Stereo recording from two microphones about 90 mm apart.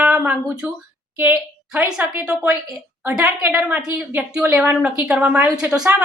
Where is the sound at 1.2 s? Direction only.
15° right (ahead or behind).